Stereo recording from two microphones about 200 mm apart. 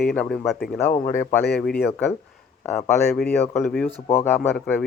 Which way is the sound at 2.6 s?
10° left (ahead or behind).